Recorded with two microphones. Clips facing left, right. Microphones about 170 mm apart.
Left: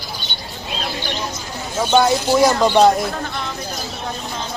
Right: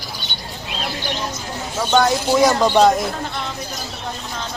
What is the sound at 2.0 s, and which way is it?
Speech, 5° left (ahead or behind).